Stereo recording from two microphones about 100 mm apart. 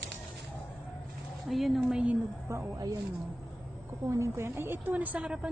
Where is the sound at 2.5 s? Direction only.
30° right (ahead or behind).